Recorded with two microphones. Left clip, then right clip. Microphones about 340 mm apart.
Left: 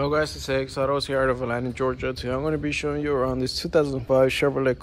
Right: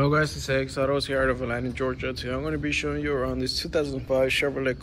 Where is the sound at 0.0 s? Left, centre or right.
Centre.